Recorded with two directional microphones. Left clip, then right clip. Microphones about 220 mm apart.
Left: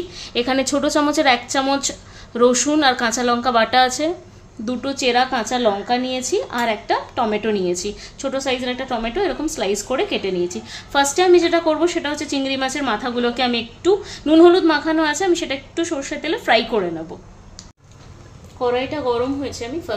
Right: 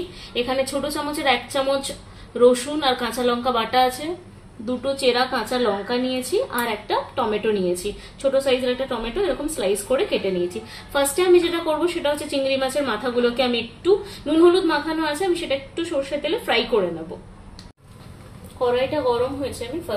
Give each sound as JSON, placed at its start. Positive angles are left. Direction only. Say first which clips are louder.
{"t": 0.1, "sound": "a woman's voice", "louder": "left 4 dB", "side_deg": 45}